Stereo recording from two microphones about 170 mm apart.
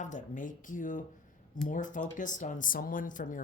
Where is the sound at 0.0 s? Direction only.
45° left (ahead or behind).